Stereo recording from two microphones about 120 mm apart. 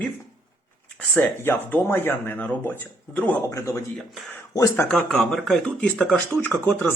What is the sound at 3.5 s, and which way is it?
A man's voice, 25° left (ahead or behind).